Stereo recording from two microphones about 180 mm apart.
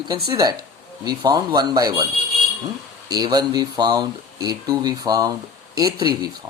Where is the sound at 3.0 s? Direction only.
20° right (ahead or behind).